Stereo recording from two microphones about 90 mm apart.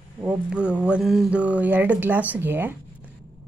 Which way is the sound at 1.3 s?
15° right (ahead or behind).